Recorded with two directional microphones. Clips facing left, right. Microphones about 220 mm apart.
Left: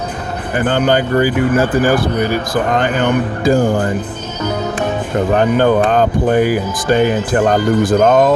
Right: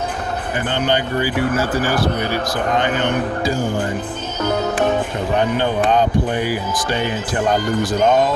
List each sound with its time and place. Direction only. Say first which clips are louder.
0.7 s speech: left 6 dB; 50° left (ahead or behind)
5.4 s speech: left 6 dB; 50° left (ahead or behind)